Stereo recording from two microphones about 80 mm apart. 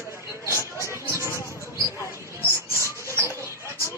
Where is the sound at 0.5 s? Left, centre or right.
Left.